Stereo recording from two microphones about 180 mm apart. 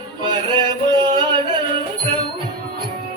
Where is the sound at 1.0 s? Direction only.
25° right (ahead or behind).